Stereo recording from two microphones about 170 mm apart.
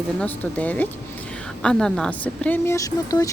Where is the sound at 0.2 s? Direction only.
10° left (ahead or behind).